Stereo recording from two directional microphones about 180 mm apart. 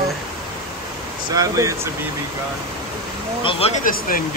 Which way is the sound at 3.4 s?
30° left (ahead or behind).